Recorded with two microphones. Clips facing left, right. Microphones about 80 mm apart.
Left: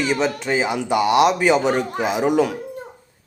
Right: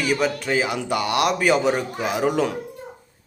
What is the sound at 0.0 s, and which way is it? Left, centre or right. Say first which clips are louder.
A man's voice: left 1 dB; left.